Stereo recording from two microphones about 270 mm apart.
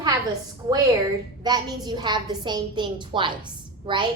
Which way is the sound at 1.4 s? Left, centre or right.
Centre.